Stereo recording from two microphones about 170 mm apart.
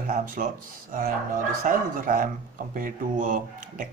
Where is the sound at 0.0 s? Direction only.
50° right (ahead or behind).